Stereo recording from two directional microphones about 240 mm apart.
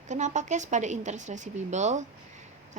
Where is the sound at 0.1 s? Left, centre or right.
Right.